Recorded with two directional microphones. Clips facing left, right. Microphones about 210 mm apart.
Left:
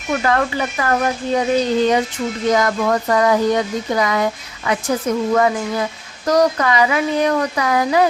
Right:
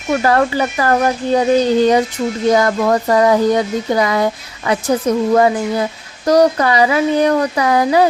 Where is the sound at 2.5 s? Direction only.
30° right (ahead or behind).